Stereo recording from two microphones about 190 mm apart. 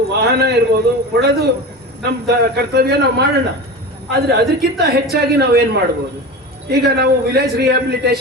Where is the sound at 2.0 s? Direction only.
60° right (ahead or behind).